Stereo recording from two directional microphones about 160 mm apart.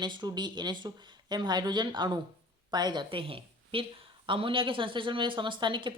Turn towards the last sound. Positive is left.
turn(degrees=-30)  # may be behind; listen again after turning